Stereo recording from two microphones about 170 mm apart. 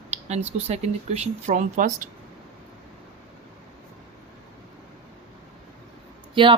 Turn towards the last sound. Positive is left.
turn(degrees=-30)  # may be behind; listen again after turning